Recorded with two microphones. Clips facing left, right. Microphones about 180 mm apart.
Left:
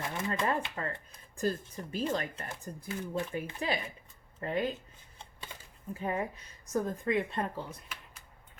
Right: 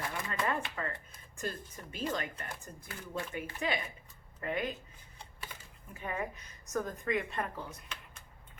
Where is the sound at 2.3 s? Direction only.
25° left (ahead or behind).